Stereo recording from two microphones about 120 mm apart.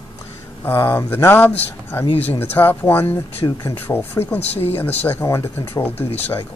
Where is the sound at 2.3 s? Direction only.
15° left (ahead or behind).